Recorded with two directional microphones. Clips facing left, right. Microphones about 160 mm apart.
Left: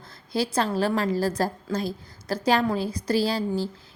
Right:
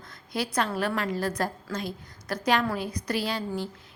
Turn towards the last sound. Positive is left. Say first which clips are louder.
# left 5 dB
turn(degrees=30)  # may be behind; listen again after turning